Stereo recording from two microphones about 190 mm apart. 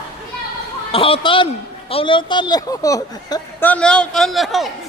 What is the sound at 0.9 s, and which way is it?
Speech, 30° left (ahead or behind).